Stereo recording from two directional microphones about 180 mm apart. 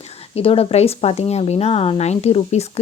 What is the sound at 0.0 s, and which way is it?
Speech, 35° left (ahead or behind).